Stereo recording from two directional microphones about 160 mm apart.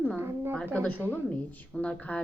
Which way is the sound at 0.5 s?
10° left (ahead or behind).